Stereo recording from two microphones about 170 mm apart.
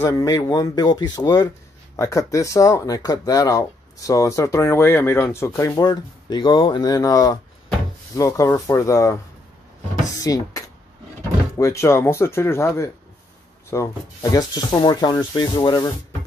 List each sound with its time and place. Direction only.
0.0 s speech: 20° left (ahead or behind)